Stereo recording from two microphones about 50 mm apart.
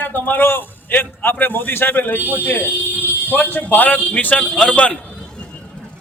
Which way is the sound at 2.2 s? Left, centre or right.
Right.